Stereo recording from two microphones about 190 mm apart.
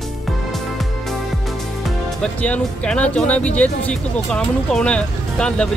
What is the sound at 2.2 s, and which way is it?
Speech, 10° left (ahead or behind).